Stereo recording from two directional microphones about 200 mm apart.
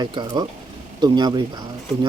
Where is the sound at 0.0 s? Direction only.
20° right (ahead or behind).